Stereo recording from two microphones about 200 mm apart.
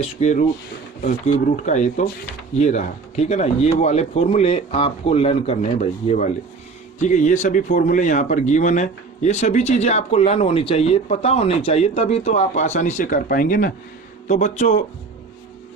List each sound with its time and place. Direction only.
0.0 s speech: 35° left (ahead or behind)